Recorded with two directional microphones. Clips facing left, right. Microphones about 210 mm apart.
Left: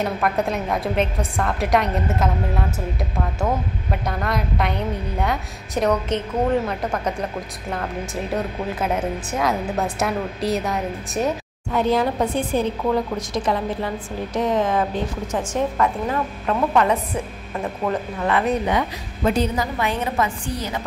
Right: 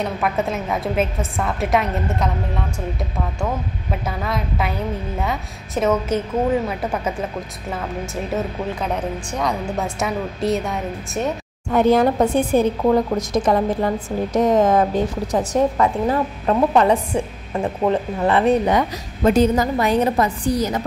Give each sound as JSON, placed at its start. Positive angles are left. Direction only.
{"t": 0.0, "sound": "a woman's voice", "side_deg": 0}
{"t": 3.9, "sound": "a woman's voice", "side_deg": 0}
{"t": 11.7, "sound": "a woman's voice", "side_deg": -50}